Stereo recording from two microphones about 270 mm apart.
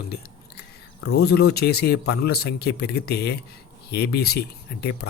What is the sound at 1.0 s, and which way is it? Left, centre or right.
Speech, left.